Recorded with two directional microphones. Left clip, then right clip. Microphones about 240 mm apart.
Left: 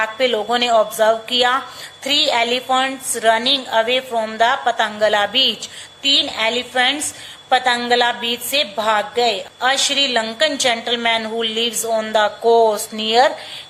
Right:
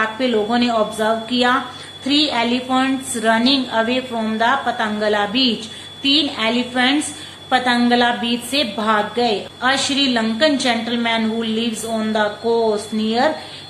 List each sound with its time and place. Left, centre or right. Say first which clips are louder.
0.0 s a woman's voice: left 1 dB; left